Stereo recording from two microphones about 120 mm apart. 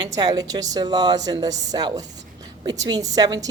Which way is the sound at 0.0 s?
35° right (ahead or behind).